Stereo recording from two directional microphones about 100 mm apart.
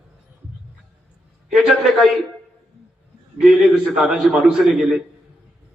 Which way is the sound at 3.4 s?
5° right (ahead or behind).